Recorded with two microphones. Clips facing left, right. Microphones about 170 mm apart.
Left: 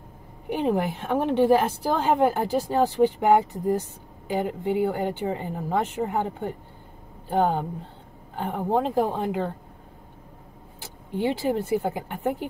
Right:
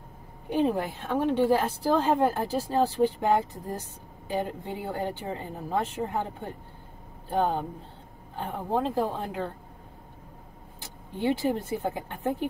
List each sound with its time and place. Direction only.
0.5 s a woman's voice: 15° left (ahead or behind)
11.1 s a woman's voice: 15° left (ahead or behind)